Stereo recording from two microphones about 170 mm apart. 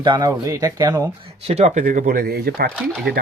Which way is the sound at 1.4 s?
40° right (ahead or behind).